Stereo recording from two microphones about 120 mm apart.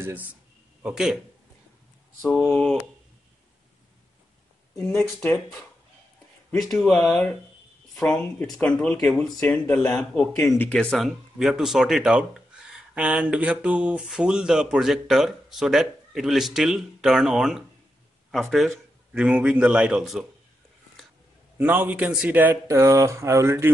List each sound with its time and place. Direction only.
0.8 s speech: 5° right (ahead or behind)
2.3 s speech: 15° left (ahead or behind)
4.9 s speech: 20° left (ahead or behind)
6.5 s speech: centre (ahead or behind)
21.5 s speech: 15° right (ahead or behind)